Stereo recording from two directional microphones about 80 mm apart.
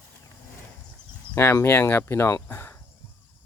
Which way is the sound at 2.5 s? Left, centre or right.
Left.